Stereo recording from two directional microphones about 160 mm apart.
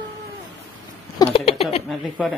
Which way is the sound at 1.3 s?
40° left (ahead or behind).